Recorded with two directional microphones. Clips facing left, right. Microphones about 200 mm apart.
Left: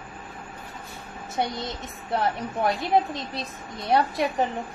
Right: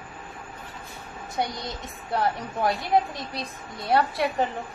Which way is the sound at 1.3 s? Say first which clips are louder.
Left 1 dB; 25° left (ahead or behind).